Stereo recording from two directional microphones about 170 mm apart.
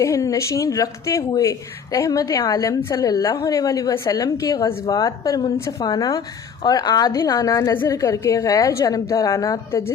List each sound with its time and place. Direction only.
0.0 s a woman's voice: 20° left (ahead or behind)